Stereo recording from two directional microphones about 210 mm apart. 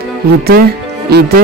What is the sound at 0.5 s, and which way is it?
Music, 45° right (ahead or behind).